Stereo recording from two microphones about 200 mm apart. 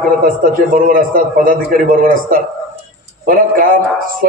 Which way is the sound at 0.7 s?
45° right (ahead or behind).